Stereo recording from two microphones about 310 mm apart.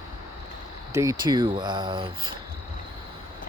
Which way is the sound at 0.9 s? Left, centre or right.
Centre.